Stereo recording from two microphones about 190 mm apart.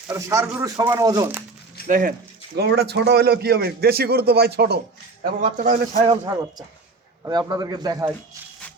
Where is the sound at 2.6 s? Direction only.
60° right (ahead or behind).